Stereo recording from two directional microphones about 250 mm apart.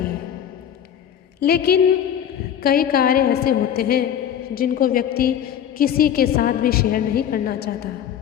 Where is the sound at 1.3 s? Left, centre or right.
Left.